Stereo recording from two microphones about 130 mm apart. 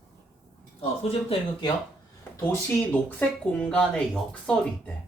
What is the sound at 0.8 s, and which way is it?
Speech, 50° left (ahead or behind).